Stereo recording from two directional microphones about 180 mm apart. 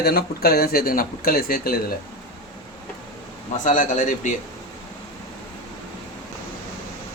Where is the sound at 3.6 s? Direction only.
45° left (ahead or behind).